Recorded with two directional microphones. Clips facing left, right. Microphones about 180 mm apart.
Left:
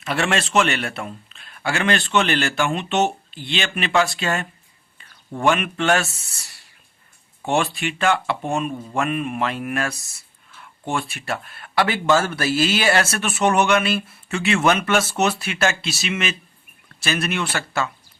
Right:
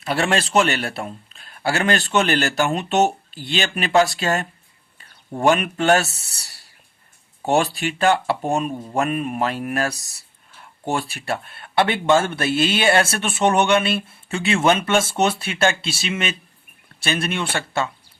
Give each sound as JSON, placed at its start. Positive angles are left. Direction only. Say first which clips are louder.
{"t": 0.0, "sound": "a man's voice", "louder": "right 1 dB", "side_deg": -35}